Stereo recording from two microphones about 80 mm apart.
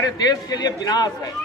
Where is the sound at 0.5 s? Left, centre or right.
Left.